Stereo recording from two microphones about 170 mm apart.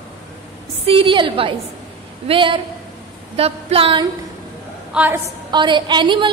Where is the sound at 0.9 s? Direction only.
30° right (ahead or behind).